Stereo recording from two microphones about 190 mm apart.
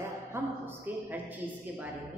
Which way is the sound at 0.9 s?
10° right (ahead or behind).